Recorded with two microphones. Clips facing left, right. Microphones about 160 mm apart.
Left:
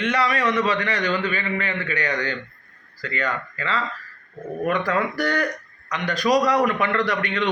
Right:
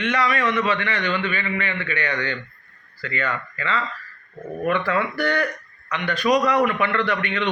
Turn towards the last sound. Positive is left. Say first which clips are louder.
# even
turn(degrees=40)  # may be behind; listen again after turning